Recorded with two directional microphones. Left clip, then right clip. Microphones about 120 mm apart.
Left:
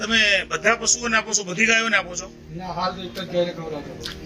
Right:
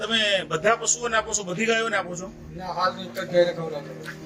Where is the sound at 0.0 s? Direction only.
Centre (ahead or behind).